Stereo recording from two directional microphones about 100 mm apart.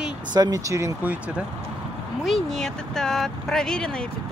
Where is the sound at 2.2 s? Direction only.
Centre (ahead or behind).